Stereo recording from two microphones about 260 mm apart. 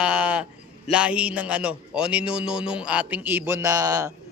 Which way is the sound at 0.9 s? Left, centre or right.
Centre.